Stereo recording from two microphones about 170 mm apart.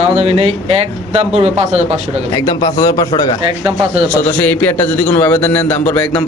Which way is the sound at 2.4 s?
25° left (ahead or behind).